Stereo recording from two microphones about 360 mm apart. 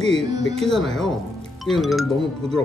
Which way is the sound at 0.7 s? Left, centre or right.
Centre.